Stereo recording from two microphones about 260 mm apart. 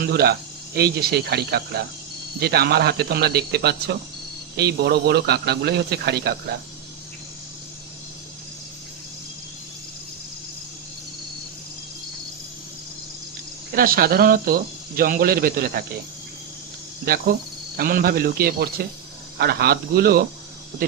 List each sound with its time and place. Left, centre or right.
0.0 s a man's voice: right
13.7 s a man's voice: right
17.1 s a man's voice: right